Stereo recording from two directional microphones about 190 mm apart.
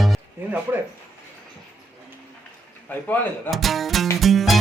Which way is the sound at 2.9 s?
10° left (ahead or behind).